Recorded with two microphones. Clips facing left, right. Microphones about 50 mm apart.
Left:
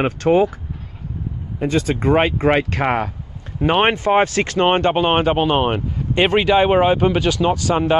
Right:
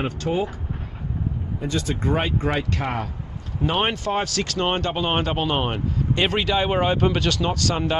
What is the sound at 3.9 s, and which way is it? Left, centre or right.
Speech, left.